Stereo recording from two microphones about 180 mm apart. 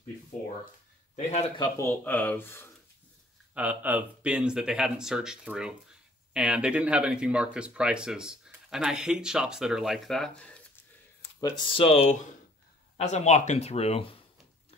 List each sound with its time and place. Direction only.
1.1 s speech: 35° left (ahead or behind)
1.6 s speech: 15° left (ahead or behind)
3.5 s speech: 10° right (ahead or behind)
11.3 s speech: 20° left (ahead or behind)